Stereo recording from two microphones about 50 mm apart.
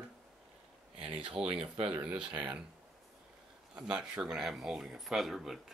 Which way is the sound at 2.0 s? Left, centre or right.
Right.